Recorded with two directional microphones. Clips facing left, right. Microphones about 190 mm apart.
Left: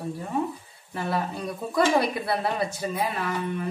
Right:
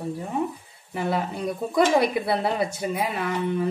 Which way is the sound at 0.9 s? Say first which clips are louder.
Right 2 dB; 20° right (ahead or behind).